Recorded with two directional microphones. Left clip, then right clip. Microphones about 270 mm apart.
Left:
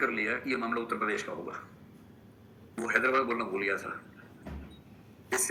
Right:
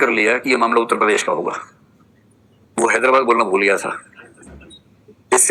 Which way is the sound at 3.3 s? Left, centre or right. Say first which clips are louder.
Right 16 dB; right.